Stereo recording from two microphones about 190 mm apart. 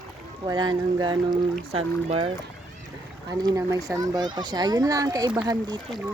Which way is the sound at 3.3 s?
20° right (ahead or behind).